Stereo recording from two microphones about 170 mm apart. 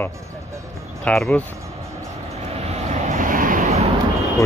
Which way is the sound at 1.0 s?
5° left (ahead or behind).